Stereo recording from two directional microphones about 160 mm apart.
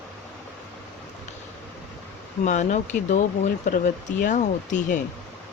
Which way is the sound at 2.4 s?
50° left (ahead or behind).